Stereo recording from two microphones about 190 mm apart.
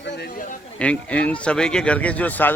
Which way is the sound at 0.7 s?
5° left (ahead or behind).